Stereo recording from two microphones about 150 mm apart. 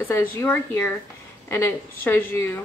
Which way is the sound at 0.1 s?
15° left (ahead or behind).